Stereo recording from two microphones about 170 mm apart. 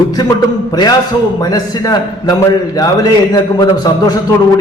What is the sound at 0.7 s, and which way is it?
A man's voice, 25° left (ahead or behind).